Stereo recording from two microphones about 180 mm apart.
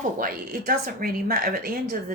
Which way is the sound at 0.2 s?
55° right (ahead or behind).